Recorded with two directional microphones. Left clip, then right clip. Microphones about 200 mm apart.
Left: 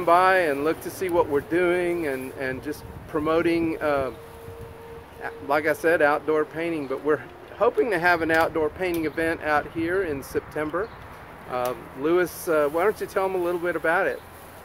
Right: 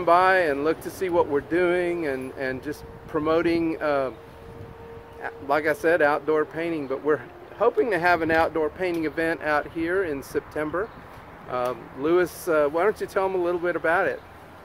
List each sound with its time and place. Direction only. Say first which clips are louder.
0.0 s speech: even; 15° right (ahead or behind)
5.2 s speech: even; 15° right (ahead or behind)